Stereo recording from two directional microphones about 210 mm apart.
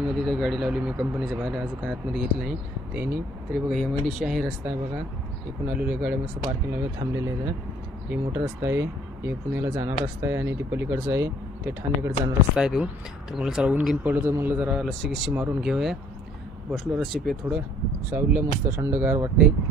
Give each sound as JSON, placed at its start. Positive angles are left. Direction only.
{"t": 0.3, "sound": "speech", "side_deg": 0}